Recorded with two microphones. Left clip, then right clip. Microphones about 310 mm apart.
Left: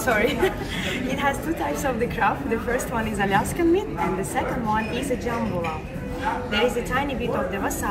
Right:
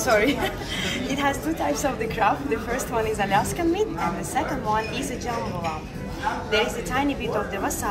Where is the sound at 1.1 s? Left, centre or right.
Right.